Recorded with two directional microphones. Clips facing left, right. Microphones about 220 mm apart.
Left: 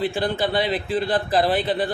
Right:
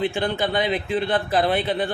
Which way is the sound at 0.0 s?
35° left (ahead or behind).